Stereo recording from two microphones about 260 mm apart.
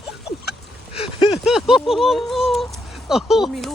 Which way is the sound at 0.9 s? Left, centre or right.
Centre.